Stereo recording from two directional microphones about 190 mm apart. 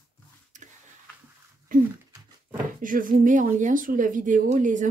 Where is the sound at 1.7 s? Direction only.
45° right (ahead or behind).